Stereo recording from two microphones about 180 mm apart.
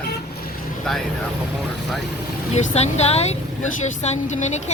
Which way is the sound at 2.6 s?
40° left (ahead or behind).